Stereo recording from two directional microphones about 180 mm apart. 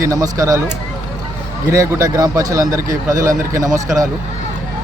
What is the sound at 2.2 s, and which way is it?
Speech, 20° right (ahead or behind).